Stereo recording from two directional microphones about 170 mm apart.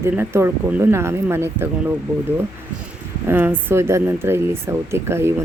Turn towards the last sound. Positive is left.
turn(degrees=-15)  # may be behind; listen again after turning